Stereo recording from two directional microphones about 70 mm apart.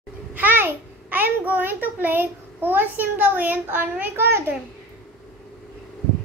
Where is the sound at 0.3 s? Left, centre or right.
Right.